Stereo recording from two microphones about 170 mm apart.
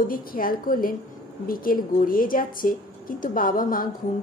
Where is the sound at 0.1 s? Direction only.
55° left (ahead or behind).